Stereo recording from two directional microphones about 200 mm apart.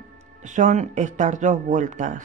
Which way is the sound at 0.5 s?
40° right (ahead or behind).